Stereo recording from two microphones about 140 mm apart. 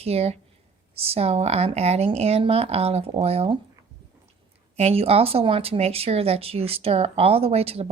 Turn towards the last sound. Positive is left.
turn(degrees=-45)  # may be behind; listen again after turning